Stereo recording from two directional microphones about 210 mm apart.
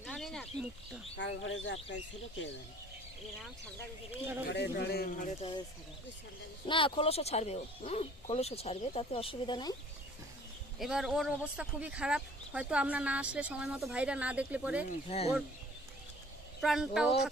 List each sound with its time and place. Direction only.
0.0 s a sound: centre (ahead or behind)
1.1 s speech: 65° left (ahead or behind)
4.1 s speech: 10° right (ahead or behind)
4.4 s speech: 50° left (ahead or behind)
5.4 s speech: 25° left (ahead or behind)
6.7 s speech: 25° left (ahead or behind)
10.8 s speech: centre (ahead or behind)
14.8 s speech: 30° left (ahead or behind)
16.6 s speech: centre (ahead or behind)